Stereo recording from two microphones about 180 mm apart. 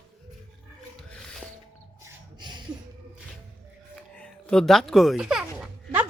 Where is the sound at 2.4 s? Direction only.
25° right (ahead or behind).